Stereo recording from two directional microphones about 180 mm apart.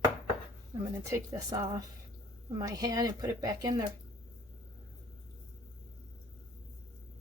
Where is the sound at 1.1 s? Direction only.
20° right (ahead or behind).